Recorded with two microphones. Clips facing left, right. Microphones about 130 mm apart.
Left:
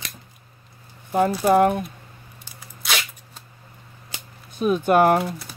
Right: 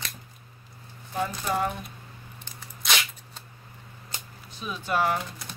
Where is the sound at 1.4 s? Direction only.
60° left (ahead or behind).